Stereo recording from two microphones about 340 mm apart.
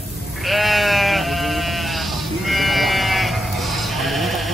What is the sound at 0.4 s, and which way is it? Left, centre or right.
Sheep, centre.